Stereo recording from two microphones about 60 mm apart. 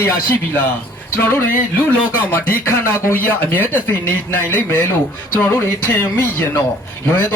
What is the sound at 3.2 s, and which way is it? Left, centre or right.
Speech, left.